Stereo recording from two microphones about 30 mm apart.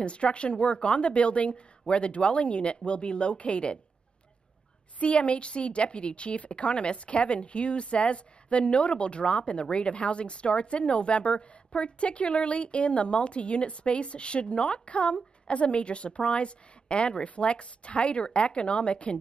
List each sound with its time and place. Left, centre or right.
0.0 s a woman's voice: left
4.9 s a woman's voice: left